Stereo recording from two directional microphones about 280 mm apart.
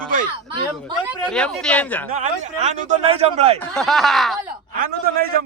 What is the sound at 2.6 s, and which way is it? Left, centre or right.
Speech, right.